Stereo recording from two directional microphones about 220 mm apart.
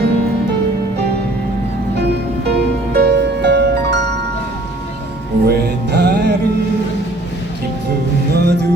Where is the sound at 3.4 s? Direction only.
50° right (ahead or behind).